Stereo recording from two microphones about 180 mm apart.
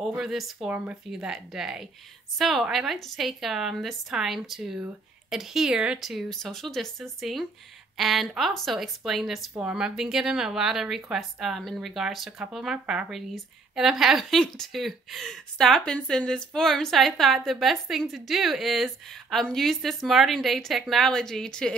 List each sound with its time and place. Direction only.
0.0 s speech: 5° right (ahead or behind)